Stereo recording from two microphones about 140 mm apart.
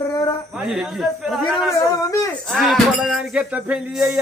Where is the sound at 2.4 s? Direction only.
Centre (ahead or behind).